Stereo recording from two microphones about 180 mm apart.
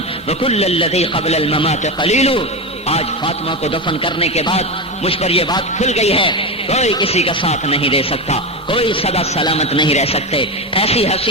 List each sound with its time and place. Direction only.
0.3 s a man's voice: 35° left (ahead or behind)